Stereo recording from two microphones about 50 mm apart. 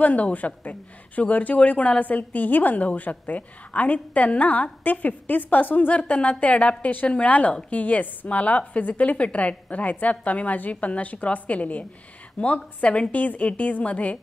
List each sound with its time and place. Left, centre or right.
0.0 s a woman's voice: left